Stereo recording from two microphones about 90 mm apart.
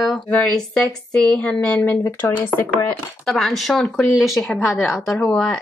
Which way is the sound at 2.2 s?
20° left (ahead or behind).